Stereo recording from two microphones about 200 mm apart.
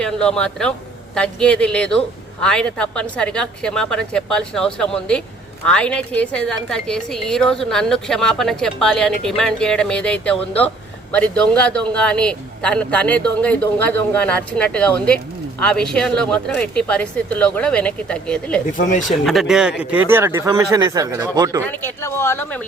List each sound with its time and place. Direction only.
0.0 s a woman's voice: 5° left (ahead or behind)
18.8 s speech: 40° left (ahead or behind)
19.0 s speech: centre (ahead or behind); by 21.6 s 15° right (ahead or behind)
21.7 s speech: 10° left (ahead or behind)